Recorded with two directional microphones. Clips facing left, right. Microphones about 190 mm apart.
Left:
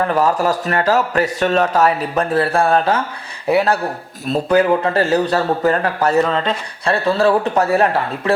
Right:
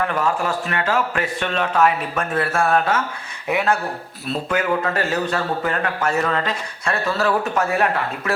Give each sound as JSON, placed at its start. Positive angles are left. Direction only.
{"t": 0.0, "sound": "speech", "side_deg": 40}